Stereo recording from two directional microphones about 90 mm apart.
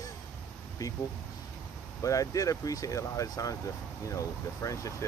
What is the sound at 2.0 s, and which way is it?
Speech, 40° left (ahead or behind).